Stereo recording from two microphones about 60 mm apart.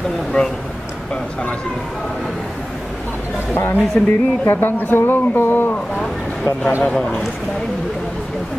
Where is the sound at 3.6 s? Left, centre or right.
Left.